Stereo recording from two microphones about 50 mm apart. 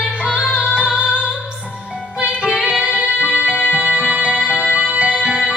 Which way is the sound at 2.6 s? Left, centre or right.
Right.